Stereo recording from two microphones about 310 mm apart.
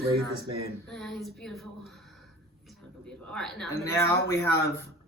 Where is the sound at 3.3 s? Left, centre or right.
Centre.